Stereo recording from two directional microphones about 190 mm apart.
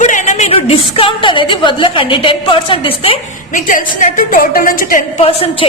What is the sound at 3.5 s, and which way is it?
A woman's voice, 45° left (ahead or behind).